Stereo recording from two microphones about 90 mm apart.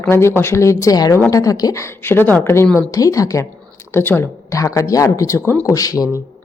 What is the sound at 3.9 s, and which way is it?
Speech, 25° left (ahead or behind).